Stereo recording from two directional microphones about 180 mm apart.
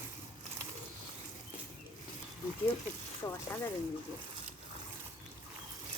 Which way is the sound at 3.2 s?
15° left (ahead or behind).